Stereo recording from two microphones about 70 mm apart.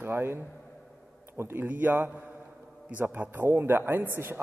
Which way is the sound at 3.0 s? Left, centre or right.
Right.